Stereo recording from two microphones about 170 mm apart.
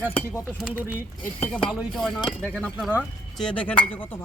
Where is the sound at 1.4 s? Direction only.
5° left (ahead or behind).